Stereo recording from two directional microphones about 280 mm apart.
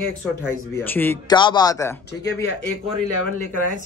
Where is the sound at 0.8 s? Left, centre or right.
Centre.